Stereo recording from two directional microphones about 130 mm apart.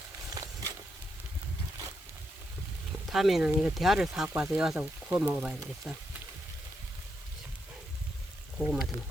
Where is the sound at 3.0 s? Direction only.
Centre (ahead or behind).